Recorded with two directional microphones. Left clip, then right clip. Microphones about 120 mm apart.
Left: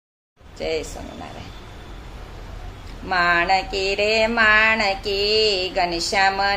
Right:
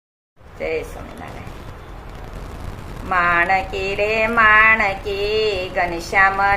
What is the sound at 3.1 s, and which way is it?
Music, 30° left (ahead or behind).